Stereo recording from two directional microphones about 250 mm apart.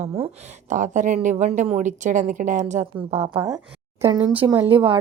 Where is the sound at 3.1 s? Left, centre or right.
Centre.